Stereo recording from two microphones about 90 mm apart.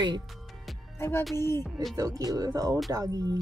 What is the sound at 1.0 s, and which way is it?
Speech, 30° left (ahead or behind).